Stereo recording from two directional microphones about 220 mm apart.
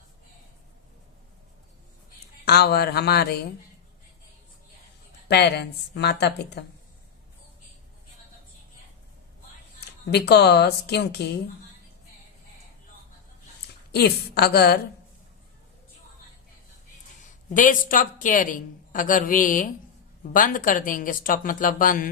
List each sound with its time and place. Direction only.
2.4 s speech: 45° left (ahead or behind)
5.3 s speech: 50° left (ahead or behind)
10.1 s speech: 50° left (ahead or behind)
13.9 s speech: 50° left (ahead or behind)
17.5 s a woman's voice: 35° left (ahead or behind)